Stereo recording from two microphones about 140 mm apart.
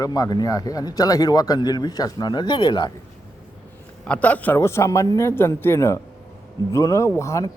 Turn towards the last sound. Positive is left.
turn(degrees=20)  # may be behind; listen again after turning